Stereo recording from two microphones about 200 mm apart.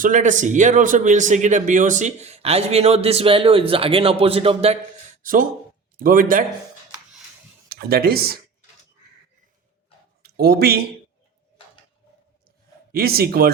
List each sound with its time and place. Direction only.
0.0 s a man's voice: 40° right (ahead or behind)
5.2 s speech: 45° right (ahead or behind)
7.7 s speech: 50° right (ahead or behind)
10.2 s speech: 50° right (ahead or behind)
12.9 s speech: 50° right (ahead or behind)